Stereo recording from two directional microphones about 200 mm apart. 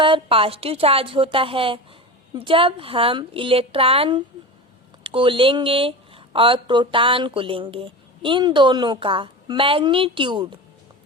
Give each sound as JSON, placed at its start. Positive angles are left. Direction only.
{"t": 0.0, "sound": "speech", "side_deg": -25}